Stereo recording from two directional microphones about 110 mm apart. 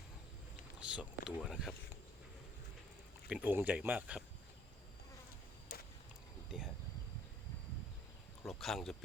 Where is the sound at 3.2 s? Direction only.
10° right (ahead or behind).